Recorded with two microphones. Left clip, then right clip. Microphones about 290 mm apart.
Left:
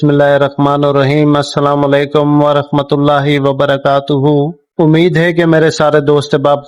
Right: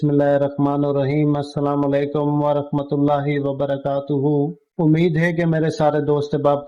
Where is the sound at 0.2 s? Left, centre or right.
Left.